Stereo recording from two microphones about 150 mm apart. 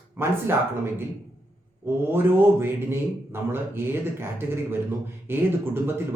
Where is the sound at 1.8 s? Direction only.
15° right (ahead or behind).